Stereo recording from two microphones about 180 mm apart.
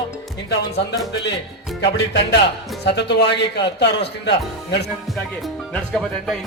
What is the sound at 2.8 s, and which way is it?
Speech, 70° left (ahead or behind).